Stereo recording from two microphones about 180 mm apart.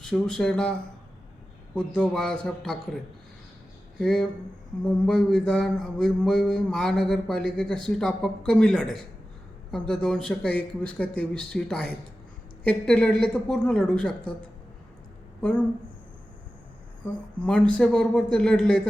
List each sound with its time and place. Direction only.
0.0 s mantra: centre (ahead or behind)
3.9 s speech: 5° left (ahead or behind)
4.8 s mantra: 5° left (ahead or behind)
15.4 s speech: 5° left (ahead or behind)
17.4 s mantra: 5° left (ahead or behind)